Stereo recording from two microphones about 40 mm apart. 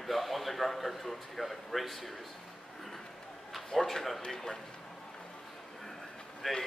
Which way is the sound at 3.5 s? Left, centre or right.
Centre.